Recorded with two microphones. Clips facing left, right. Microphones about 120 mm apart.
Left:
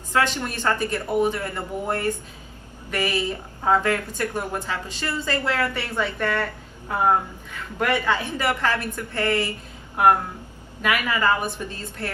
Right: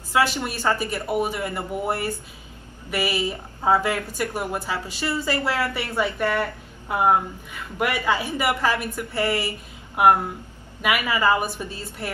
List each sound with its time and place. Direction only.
0.1 s a woman's voice: 10° right (ahead or behind)